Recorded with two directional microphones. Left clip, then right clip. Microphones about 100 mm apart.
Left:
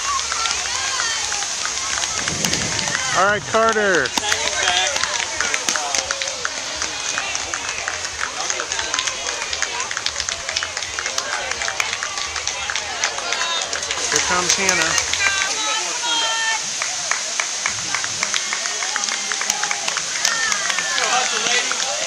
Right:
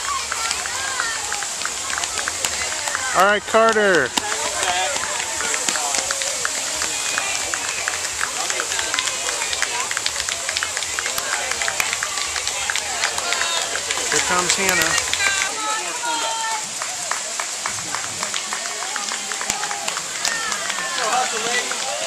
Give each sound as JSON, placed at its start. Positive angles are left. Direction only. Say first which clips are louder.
{"t": 3.2, "sound": "speech", "louder": "right 2 dB", "side_deg": -15}
{"t": 14.1, "sound": "run", "louder": "left 1 dB", "side_deg": 0}